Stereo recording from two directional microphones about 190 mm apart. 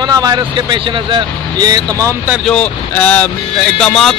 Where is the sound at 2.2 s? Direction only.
5° right (ahead or behind).